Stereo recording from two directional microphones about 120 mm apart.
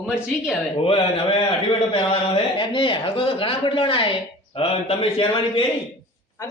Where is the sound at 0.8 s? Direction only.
50° left (ahead or behind).